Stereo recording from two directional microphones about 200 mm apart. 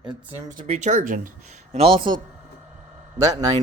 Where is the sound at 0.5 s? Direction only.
35° right (ahead or behind).